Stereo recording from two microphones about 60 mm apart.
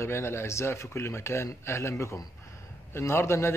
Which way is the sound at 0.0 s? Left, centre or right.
Left.